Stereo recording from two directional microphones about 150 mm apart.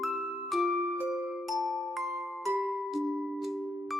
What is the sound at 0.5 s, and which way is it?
Music, centre (ahead or behind).